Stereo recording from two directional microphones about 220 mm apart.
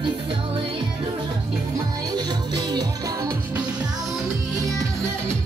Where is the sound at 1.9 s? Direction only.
15° right (ahead or behind).